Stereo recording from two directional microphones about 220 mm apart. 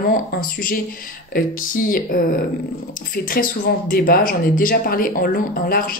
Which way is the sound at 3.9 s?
40° left (ahead or behind).